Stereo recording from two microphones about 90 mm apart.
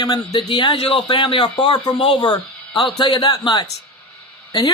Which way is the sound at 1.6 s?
50° left (ahead or behind).